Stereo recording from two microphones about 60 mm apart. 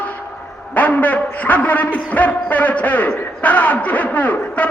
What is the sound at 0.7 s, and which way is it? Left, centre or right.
A man's voice, left.